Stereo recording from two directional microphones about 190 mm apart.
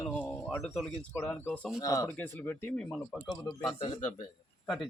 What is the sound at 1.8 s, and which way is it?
Speech, 15° left (ahead or behind).